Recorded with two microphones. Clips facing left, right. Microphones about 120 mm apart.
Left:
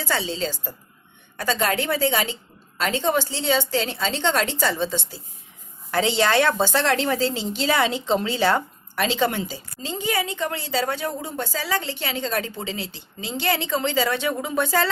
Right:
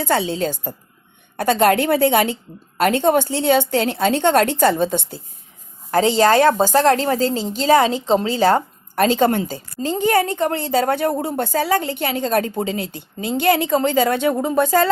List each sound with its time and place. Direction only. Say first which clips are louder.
0.0 s a woman's voice: right 6 dB; 55° right (ahead or behind)
5.9 s a woman's voice: right 6 dB; 40° right (ahead or behind)